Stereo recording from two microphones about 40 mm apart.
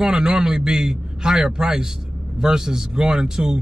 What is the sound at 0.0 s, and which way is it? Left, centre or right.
A man's voice, centre.